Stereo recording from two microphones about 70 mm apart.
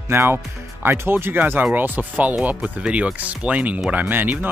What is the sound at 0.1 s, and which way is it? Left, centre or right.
Speech, right.